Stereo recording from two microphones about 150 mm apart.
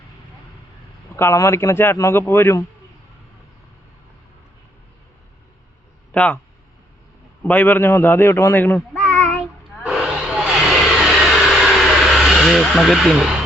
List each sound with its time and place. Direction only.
1.1 s speech: 20° left (ahead or behind)
6.1 s speech: 10° left (ahead or behind)
7.4 s speech: 10° left (ahead or behind)
9.0 s child singing: 5° left (ahead or behind)
9.8 s vehicle: 5° right (ahead or behind)